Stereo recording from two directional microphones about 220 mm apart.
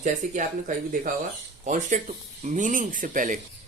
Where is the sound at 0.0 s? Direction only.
35° right (ahead or behind).